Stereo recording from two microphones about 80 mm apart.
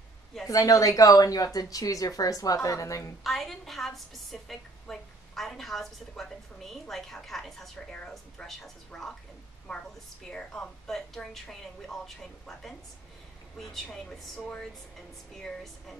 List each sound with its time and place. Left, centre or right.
0.5 s speech: left
3.3 s a woman's voice: centre
15.4 s a woman's voice: centre